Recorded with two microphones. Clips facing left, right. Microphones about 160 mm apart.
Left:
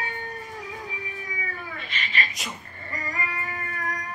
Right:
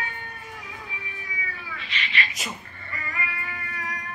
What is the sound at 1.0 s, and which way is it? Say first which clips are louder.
Cat: left 3 dB; 45° left (ahead or behind).